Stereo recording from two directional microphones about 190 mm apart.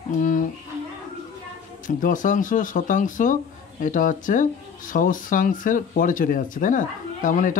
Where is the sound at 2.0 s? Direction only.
45° left (ahead or behind).